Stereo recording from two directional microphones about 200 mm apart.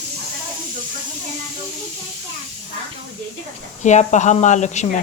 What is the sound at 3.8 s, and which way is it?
Speech, 35° left (ahead or behind).